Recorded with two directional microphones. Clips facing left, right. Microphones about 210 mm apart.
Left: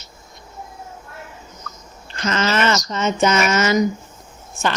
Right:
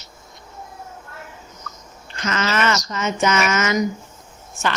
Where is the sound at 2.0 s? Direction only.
30° left (ahead or behind).